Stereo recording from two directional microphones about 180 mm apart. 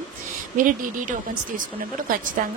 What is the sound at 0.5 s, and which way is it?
A woman's voice, 50° right (ahead or behind).